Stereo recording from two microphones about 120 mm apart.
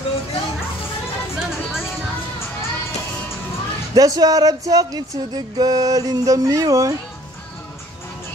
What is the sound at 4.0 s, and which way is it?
Music, 30° right (ahead or behind).